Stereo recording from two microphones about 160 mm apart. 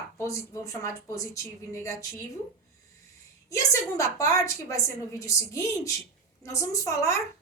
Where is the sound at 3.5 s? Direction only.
20° left (ahead or behind).